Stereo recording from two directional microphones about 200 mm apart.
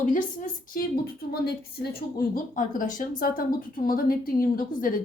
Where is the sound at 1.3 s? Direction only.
50° left (ahead or behind).